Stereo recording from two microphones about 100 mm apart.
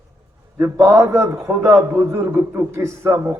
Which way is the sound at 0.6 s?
25° right (ahead or behind).